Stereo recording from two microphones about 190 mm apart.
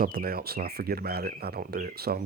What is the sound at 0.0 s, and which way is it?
Speech, 50° right (ahead or behind).